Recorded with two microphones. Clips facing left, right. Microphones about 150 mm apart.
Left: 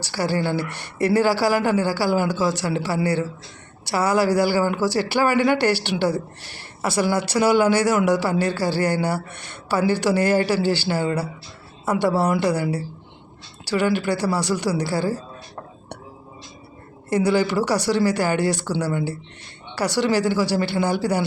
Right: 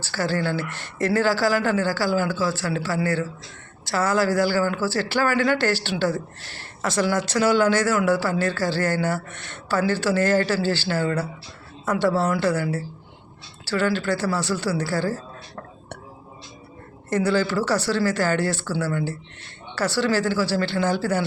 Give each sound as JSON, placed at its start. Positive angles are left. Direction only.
{"t": 0.0, "sound": "speech", "side_deg": 15}
{"t": 17.1, "sound": "speech", "side_deg": 15}